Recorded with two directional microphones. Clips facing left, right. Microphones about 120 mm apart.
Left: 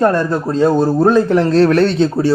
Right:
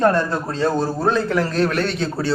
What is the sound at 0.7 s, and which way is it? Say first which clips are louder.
Speech: left 8 dB; 15° left (ahead or behind).